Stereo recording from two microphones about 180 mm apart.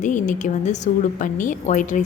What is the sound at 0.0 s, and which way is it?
A woman's voice, 45° left (ahead or behind).